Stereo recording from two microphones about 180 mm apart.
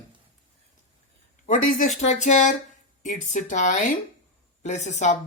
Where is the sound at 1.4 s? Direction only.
45° left (ahead or behind).